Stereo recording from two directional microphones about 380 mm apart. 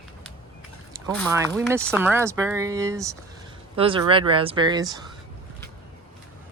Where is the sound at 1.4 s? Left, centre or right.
Centre.